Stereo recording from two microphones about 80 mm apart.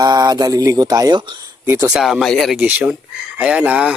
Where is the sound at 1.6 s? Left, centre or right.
Right.